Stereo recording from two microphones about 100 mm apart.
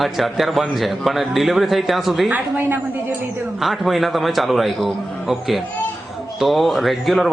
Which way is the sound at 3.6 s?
Centre (ahead or behind).